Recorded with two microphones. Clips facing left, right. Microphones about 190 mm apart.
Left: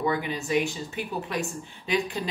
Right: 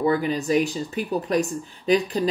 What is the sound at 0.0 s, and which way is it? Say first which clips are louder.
A woman's voice: right 6 dB; 40° right (ahead or behind).